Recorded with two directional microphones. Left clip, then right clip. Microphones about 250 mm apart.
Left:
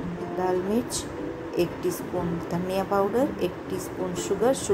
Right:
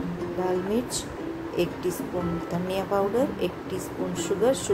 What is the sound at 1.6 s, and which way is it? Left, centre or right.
Speech, centre.